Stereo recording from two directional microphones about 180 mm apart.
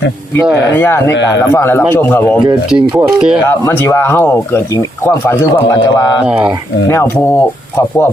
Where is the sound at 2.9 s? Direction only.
10° right (ahead or behind).